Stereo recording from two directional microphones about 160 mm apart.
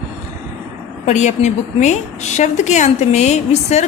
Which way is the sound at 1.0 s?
45° left (ahead or behind).